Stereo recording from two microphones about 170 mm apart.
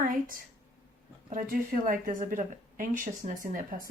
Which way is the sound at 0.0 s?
55° right (ahead or behind).